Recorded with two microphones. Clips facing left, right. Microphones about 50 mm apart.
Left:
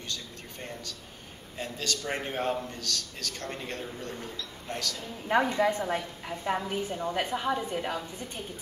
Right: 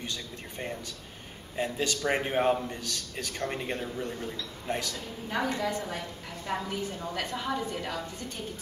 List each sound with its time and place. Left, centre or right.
0.0 s a sound: centre
1.6 s a man's voice: centre
5.5 s a woman's voice: left